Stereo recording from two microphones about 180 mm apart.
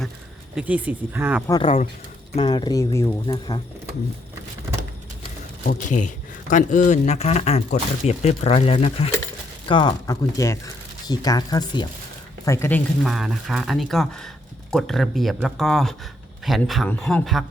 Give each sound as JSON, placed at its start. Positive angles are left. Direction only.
{"t": 0.5, "sound": "speech", "side_deg": -10}
{"t": 1.5, "sound": "speech", "side_deg": 30}
{"t": 5.6, "sound": "a man's voice", "side_deg": 45}
{"t": 12.5, "sound": "speech", "side_deg": 15}
{"t": 13.1, "sound": "speech", "side_deg": 0}